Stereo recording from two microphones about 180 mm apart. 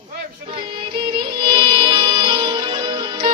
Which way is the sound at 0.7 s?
25° right (ahead or behind).